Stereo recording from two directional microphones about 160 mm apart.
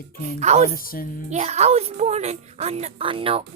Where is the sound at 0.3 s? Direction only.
45° right (ahead or behind).